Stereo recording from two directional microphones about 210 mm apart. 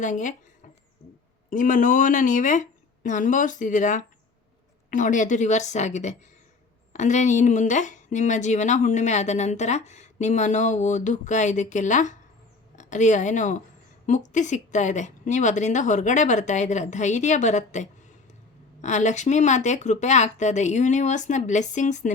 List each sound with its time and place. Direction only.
0.0 s speech: 35° left (ahead or behind)
1.5 s a woman's voice: 40° left (ahead or behind)